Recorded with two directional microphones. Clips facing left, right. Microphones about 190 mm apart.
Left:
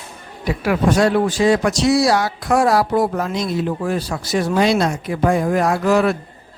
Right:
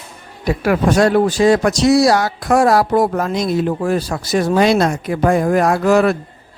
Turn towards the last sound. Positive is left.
turn(degrees=-50)  # may be behind; listen again after turning